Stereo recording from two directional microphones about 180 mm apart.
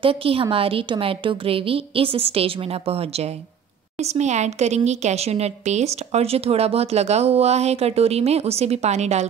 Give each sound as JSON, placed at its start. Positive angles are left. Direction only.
{"t": 0.0, "sound": "a woman's voice", "side_deg": -30}